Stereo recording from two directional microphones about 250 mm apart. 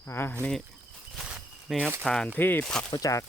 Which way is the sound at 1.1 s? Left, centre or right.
Centre.